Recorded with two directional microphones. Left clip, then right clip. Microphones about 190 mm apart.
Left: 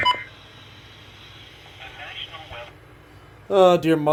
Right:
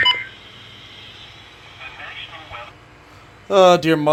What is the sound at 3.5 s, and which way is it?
Speech, centre (ahead or behind).